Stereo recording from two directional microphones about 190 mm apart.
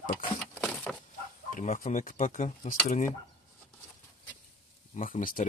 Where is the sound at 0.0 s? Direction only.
50° left (ahead or behind).